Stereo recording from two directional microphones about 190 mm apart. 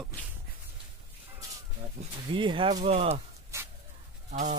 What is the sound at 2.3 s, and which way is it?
Speech, 25° right (ahead or behind).